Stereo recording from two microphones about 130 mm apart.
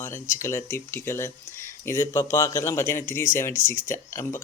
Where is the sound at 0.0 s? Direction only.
20° left (ahead or behind).